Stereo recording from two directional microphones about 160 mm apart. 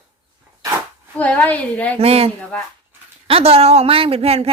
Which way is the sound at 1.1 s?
10° left (ahead or behind).